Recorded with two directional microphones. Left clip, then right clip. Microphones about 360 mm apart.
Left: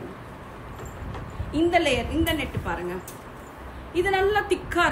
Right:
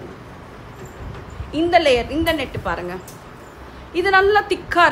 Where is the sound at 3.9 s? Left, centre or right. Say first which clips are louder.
Right 8 dB; centre.